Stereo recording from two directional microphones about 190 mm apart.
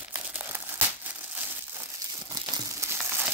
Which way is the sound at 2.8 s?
15° right (ahead or behind).